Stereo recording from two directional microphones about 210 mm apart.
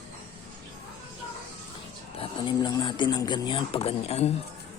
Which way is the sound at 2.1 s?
20° left (ahead or behind).